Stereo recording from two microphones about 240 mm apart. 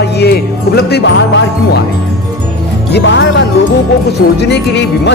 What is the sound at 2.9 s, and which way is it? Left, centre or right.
Speech, left.